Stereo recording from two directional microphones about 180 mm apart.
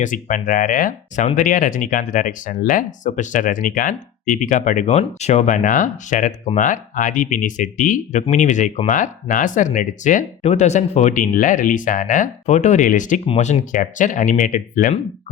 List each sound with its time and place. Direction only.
0.0 s speech: 45° left (ahead or behind)